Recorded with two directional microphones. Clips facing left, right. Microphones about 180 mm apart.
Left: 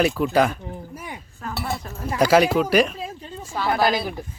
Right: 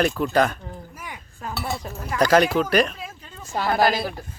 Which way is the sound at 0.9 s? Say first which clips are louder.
Left 3 dB; 30° left (ahead or behind).